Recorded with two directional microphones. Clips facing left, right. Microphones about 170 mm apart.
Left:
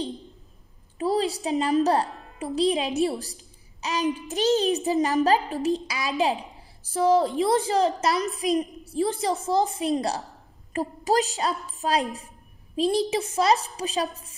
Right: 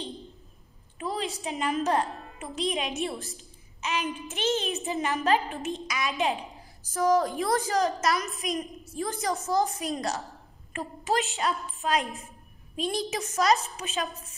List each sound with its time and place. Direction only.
0.9 s a woman's voice: 35° left (ahead or behind)